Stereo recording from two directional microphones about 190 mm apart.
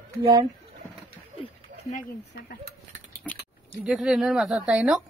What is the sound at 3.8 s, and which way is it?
A woman's voice, centre (ahead or behind).